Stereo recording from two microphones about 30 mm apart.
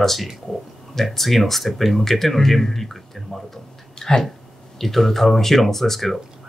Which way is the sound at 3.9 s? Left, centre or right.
Left.